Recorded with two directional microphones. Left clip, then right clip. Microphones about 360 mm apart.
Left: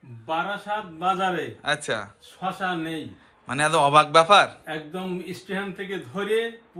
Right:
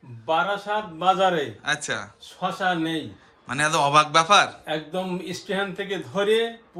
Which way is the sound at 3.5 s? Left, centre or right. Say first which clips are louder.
Left 1 dB; centre.